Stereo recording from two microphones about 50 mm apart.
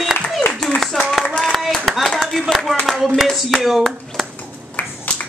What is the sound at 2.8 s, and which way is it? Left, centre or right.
Clapping, centre.